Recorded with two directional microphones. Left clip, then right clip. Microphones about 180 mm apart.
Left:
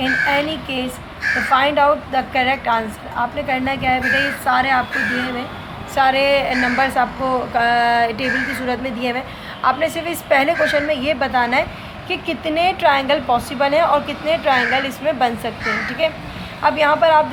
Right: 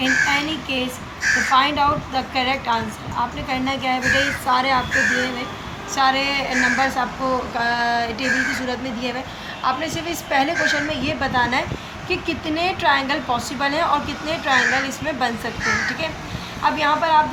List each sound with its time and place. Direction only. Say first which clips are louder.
0.0 s a woman's voice: left 1 dB; 35° left (ahead or behind)